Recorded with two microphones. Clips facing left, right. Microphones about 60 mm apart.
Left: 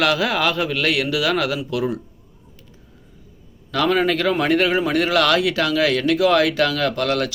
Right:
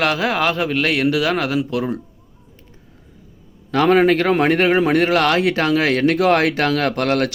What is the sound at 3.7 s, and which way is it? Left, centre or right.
A man's voice, right.